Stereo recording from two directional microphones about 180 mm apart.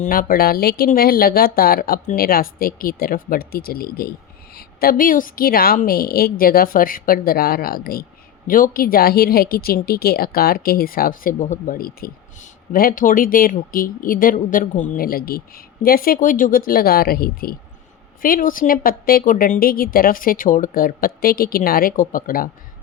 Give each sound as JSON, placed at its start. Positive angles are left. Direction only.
{"t": 0.0, "sound": "a woman's voice", "side_deg": 50}